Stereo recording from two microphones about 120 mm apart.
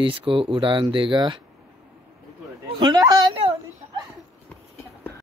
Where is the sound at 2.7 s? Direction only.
35° right (ahead or behind).